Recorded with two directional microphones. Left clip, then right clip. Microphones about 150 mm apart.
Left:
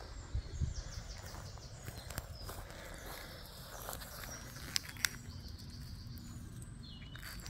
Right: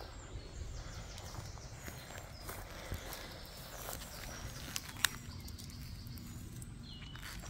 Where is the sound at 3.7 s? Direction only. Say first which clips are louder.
Even; 15° right (ahead or behind).